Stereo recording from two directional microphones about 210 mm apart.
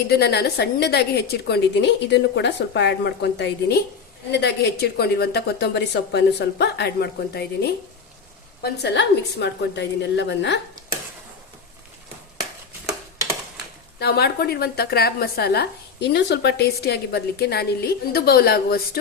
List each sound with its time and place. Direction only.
0.1 s a woman's voice: 50° left (ahead or behind)
14.0 s a woman's voice: 50° left (ahead or behind)